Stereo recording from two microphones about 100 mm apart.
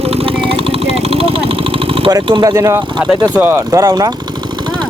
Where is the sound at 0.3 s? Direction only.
70° right (ahead or behind).